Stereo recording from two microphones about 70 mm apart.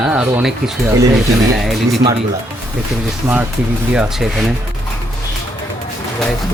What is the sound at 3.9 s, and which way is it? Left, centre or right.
Speech, centre.